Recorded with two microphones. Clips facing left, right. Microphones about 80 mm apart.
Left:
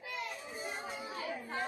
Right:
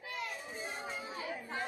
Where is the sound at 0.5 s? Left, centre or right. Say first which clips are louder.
Left 4 dB; left.